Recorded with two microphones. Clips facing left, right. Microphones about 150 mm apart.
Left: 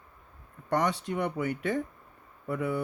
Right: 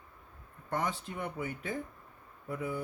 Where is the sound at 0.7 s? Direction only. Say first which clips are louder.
Left 7 dB; 75° left (ahead or behind).